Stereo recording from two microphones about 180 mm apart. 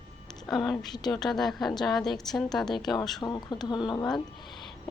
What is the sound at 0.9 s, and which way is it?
Speech, 25° left (ahead or behind).